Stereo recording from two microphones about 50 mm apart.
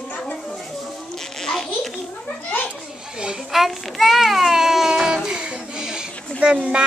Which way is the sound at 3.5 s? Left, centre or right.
Centre.